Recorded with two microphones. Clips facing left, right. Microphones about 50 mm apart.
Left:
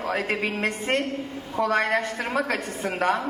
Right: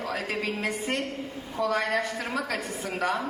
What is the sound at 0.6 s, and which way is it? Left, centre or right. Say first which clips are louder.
A man's voice: left 4 dB; left.